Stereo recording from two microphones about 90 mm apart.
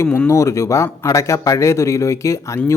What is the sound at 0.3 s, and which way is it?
Speech, 35° left (ahead or behind).